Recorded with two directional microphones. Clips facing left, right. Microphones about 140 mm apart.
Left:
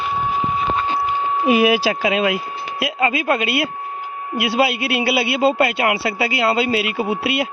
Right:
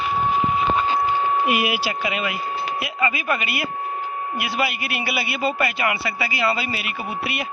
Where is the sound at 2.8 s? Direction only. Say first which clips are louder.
Left 10 dB; 75° left (ahead or behind).